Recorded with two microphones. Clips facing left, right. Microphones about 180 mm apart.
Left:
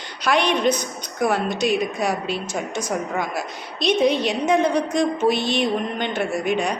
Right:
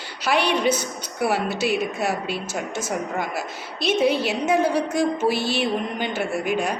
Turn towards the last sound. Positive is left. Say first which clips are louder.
# left 1 dB
turn(degrees=-5)  # may be behind; listen again after turning